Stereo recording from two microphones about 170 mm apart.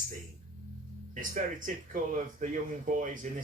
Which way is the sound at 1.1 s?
50° right (ahead or behind).